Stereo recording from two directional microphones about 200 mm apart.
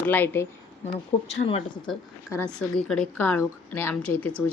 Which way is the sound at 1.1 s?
30° left (ahead or behind).